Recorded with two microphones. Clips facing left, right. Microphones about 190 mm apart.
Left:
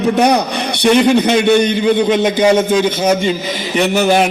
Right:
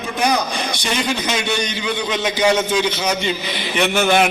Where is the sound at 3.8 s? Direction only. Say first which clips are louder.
Left 4 dB; 35° left (ahead or behind).